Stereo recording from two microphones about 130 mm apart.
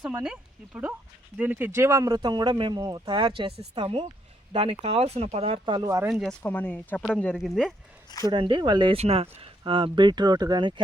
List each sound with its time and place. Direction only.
0.0 s speech: 10° right (ahead or behind); by 6.0 s 30° right (ahead or behind)
6.0 s speech: 10° right (ahead or behind)
6.4 s speech: 15° left (ahead or behind)
8.2 s speech: 40° right (ahead or behind)
9.0 s speech: 50° right (ahead or behind); by 10.8 s 35° right (ahead or behind)